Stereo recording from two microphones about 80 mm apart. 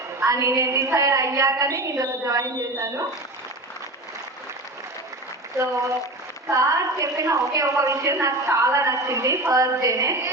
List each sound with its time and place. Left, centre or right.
0.3 s a woman's voice: right
6.5 s a woman's voice: right
9.6 s a woman's voice: right